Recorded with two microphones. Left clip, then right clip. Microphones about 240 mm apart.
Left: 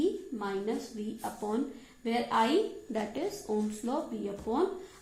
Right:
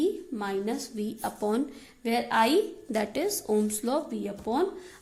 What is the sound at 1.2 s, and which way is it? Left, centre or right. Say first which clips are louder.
A woman's voice: right 5 dB; right.